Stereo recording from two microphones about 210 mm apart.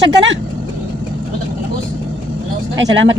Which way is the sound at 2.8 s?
60° right (ahead or behind).